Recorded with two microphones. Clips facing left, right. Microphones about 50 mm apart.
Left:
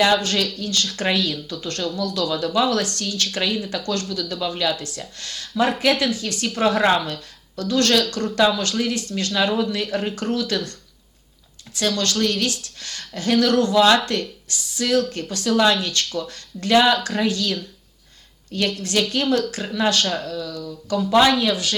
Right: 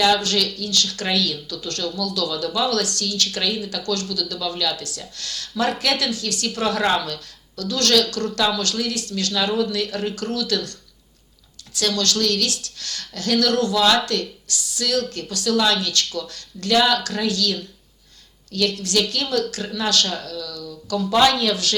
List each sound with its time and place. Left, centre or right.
0.0 s speech: left
21.0 s speech: centre